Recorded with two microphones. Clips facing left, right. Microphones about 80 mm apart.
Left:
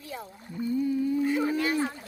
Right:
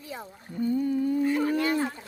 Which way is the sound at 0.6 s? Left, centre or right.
Right.